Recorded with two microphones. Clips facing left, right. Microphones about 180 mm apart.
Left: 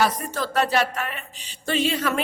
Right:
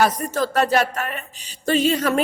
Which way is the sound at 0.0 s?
45° right (ahead or behind).